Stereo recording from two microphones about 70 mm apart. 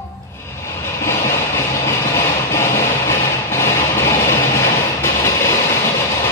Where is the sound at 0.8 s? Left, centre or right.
Left.